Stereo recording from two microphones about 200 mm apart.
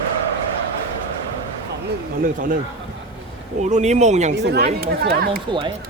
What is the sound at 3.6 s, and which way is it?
Speech, 35° right (ahead or behind).